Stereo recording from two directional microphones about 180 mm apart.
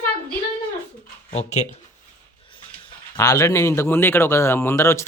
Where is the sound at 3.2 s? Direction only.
15° left (ahead or behind).